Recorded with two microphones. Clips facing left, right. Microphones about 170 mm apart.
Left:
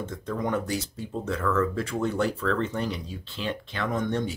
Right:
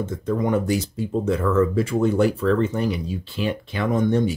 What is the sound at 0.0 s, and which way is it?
Speech, 5° right (ahead or behind).